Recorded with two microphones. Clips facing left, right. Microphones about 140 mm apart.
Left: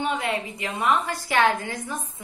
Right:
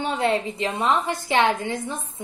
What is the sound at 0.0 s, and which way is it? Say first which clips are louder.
A woman's voice: right 4 dB; 30° right (ahead or behind).